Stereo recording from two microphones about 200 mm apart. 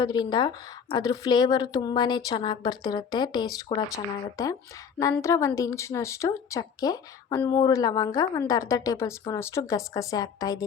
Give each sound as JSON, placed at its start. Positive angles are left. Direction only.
{"t": 0.0, "sound": "a woman's voice", "side_deg": 20}